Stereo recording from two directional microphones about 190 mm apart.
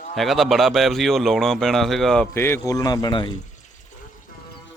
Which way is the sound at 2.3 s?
15° left (ahead or behind).